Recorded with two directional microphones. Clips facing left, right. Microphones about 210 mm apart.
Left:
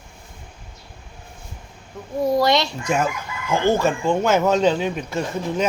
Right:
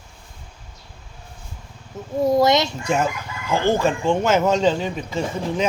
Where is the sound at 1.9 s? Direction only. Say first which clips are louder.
Right 2 dB; 25° right (ahead or behind).